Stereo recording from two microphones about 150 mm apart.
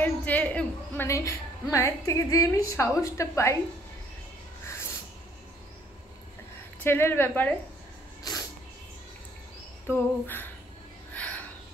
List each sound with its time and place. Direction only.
0.0 s a woman's voice: 10° left (ahead or behind)
6.8 s a woman's voice: 15° left (ahead or behind)
8.2 s cat: 25° left (ahead or behind)
9.8 s a woman's voice: 15° left (ahead or behind)
11.1 s a sound: 10° left (ahead or behind)